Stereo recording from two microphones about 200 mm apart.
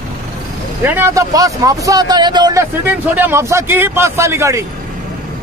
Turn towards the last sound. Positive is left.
turn(degrees=-15)  # may be behind; listen again after turning